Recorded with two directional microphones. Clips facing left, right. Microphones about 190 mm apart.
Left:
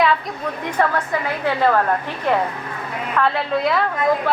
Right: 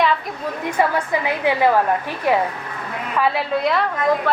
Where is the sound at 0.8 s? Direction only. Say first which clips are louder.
Right 1 dB; 15° right (ahead or behind).